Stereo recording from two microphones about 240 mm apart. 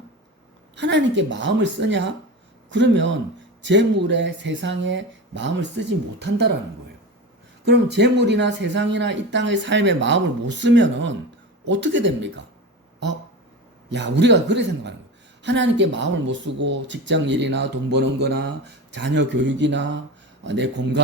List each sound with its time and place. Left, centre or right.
0.8 s speech: right
7.6 s speech: right
13.9 s speech: right